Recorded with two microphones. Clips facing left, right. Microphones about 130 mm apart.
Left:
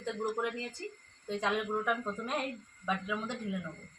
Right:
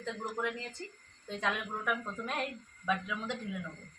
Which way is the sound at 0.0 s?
10° left (ahead or behind).